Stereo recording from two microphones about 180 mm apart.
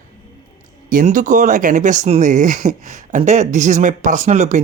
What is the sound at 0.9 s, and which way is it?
Speech, 45° right (ahead or behind).